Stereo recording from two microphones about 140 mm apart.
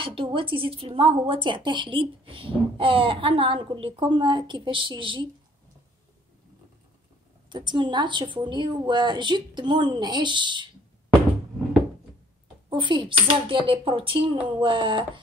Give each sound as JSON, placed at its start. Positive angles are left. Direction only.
{"t": 0.0, "sound": "speech", "side_deg": -40}
{"t": 7.5, "sound": "speech", "side_deg": -35}
{"t": 12.6, "sound": "speech", "side_deg": -35}